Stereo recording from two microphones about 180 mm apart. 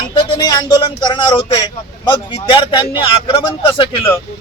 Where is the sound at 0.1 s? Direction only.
25° left (ahead or behind).